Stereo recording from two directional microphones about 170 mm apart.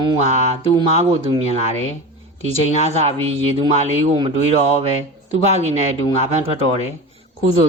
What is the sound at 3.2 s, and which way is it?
Speech, 35° right (ahead or behind).